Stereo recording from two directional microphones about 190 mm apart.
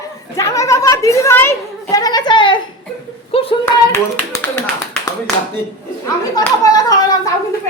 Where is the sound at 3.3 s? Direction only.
30° left (ahead or behind).